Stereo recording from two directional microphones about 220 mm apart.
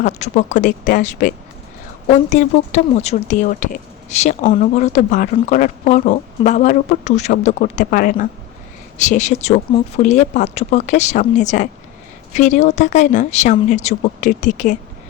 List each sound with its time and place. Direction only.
0.0 s speech: 30° left (ahead or behind)